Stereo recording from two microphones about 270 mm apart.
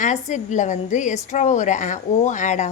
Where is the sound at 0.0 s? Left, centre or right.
Left.